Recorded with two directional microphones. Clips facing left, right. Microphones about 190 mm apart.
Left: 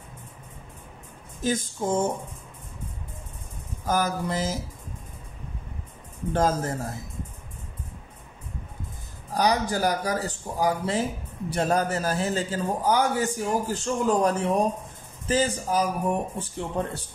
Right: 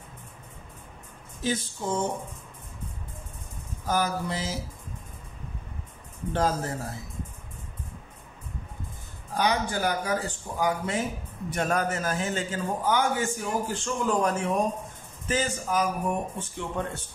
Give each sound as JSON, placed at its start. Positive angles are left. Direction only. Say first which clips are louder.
{"t": 1.4, "sound": "speech", "louder": "left 3 dB", "side_deg": 45}
{"t": 3.8, "sound": "speech", "louder": "left 2 dB", "side_deg": 45}
{"t": 6.3, "sound": "speech", "louder": "left 3 dB", "side_deg": 45}
{"t": 9.3, "sound": "a man's voice", "louder": "left 3 dB", "side_deg": 35}